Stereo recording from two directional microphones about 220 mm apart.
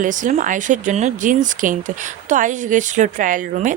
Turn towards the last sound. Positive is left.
turn(degrees=-35)  # may be behind; listen again after turning